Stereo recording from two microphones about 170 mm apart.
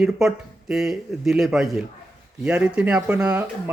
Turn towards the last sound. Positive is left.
turn(degrees=-5)  # may be behind; listen again after turning